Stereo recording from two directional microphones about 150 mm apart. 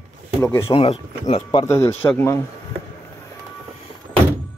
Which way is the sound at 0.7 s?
40° left (ahead or behind).